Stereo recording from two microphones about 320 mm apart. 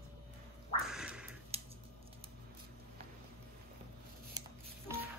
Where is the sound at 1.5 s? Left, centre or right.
Centre.